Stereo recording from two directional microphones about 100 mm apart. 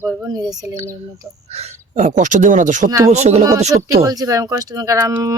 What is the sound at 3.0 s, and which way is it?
Speech, 90° right.